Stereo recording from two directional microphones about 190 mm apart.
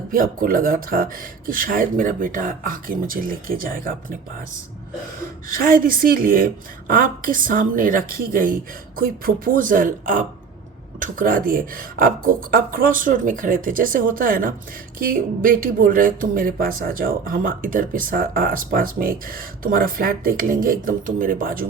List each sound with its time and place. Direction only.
0.1 s speech: 50° right (ahead or behind)
5.5 s speech: 50° right (ahead or behind)